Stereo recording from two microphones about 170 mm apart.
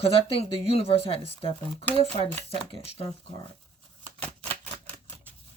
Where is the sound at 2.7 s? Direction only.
35° left (ahead or behind).